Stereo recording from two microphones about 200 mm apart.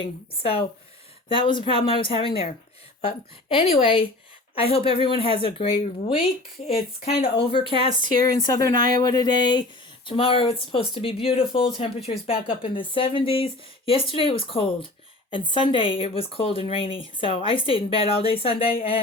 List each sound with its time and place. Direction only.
0.0 s speech: 30° left (ahead or behind)